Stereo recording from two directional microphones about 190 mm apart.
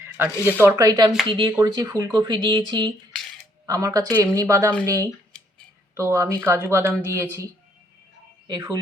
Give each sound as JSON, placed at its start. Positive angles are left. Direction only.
{"t": 0.0, "sound": "speech", "side_deg": -10}
{"t": 8.4, "sound": "speech", "side_deg": -20}